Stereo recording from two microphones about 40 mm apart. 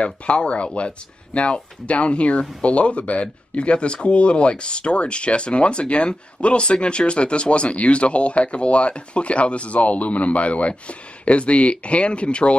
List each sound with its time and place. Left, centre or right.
0.0 s speech: left